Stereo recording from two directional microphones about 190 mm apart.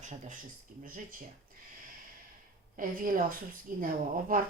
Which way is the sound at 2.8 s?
45° right (ahead or behind).